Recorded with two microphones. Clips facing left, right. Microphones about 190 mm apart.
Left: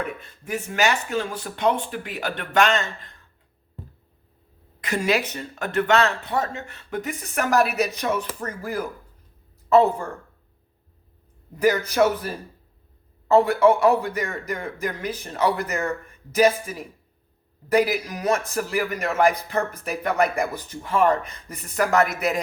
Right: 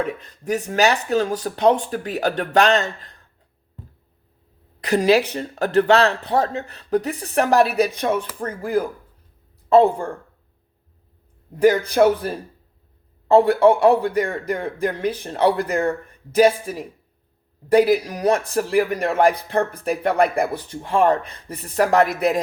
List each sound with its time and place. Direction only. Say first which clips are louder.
0.0 s a man's voice: right 5 dB; 35° right (ahead or behind)
4.8 s a man's voice: right 7 dB; 35° right (ahead or behind)
11.5 s speech: right 4 dB; 30° right (ahead or behind)
13.3 s a man's voice: right 3 dB; 30° right (ahead or behind)